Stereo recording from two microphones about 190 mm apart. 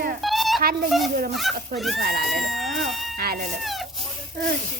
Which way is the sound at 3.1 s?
55° right (ahead or behind).